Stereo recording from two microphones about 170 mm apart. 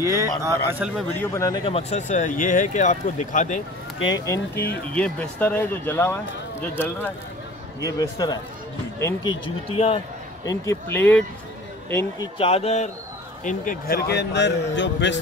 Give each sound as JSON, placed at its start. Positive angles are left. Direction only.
{"t": 0.0, "sound": "a man's voice", "side_deg": -20}
{"t": 1.2, "sound": "speech", "side_deg": 20}
{"t": 1.7, "sound": "speech", "side_deg": 40}
{"t": 4.0, "sound": "speech", "side_deg": 20}
{"t": 4.9, "sound": "a man's voice", "side_deg": 5}
{"t": 10.4, "sound": "speech", "side_deg": 20}
{"t": 12.4, "sound": "a man's voice", "side_deg": 35}